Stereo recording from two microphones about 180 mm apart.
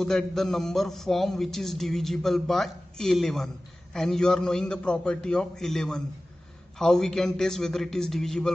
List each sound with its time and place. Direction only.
0.0 s a man's voice: centre (ahead or behind)